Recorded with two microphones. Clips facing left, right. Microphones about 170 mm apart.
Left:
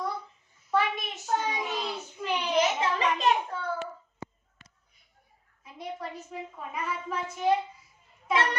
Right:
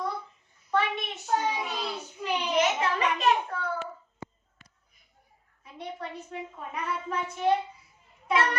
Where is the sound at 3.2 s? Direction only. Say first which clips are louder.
Right 1 dB; 30° left (ahead or behind).